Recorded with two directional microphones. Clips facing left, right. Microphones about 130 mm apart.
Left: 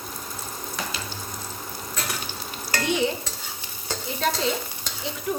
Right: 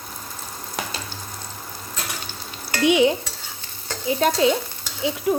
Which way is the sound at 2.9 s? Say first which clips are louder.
Right 8 dB; 75° right (ahead or behind).